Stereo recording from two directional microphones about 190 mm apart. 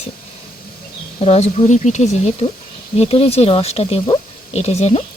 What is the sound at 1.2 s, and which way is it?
Speech, 35° left (ahead or behind).